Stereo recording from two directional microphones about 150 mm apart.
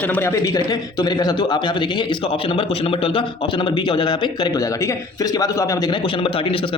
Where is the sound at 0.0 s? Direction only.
10° left (ahead or behind).